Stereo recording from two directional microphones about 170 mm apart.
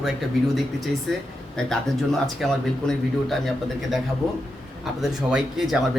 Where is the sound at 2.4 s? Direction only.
5° left (ahead or behind).